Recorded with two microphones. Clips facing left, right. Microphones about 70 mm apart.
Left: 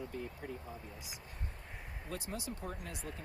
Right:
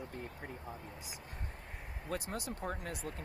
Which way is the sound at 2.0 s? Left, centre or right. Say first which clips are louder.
Right 3 dB; right.